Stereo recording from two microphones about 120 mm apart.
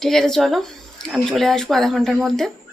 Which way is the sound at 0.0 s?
5° left (ahead or behind).